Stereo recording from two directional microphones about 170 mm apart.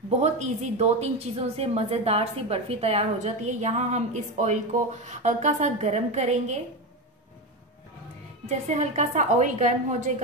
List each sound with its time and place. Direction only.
0.2 s a woman's voice: 40° right (ahead or behind)
8.5 s a woman's voice: 40° right (ahead or behind)